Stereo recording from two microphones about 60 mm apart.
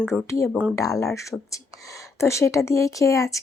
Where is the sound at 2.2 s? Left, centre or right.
Left.